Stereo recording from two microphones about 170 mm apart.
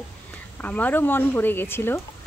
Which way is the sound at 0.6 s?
10° left (ahead or behind).